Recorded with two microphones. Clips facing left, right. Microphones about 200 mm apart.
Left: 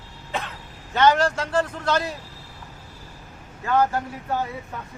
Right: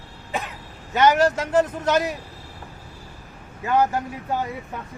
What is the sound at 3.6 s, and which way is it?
Speech, 15° right (ahead or behind).